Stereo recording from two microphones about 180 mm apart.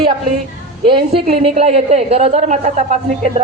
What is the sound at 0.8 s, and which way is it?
A woman's voice, 30° right (ahead or behind).